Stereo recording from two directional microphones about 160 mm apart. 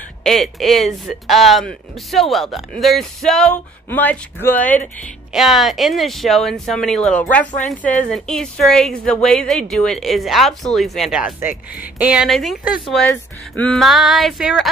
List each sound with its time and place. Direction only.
0.2 s speech: centre (ahead or behind)
5.3 s speech: centre (ahead or behind)